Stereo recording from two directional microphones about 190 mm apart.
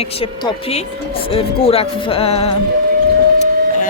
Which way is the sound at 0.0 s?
30° left (ahead or behind).